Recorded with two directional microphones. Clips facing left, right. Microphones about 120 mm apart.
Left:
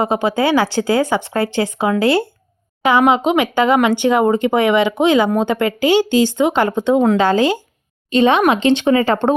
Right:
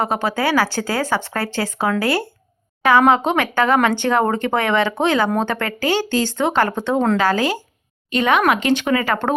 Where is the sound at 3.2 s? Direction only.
15° left (ahead or behind).